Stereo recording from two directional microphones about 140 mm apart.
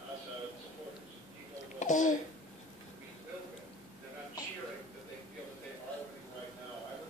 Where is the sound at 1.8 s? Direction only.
65° left (ahead or behind).